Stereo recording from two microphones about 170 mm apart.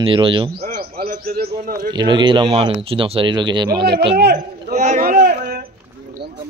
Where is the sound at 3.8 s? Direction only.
70° right (ahead or behind).